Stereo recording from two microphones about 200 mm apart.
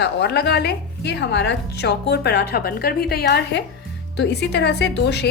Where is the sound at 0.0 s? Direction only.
55° left (ahead or behind).